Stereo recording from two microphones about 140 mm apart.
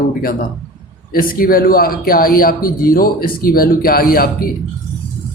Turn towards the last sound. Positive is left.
turn(degrees=90)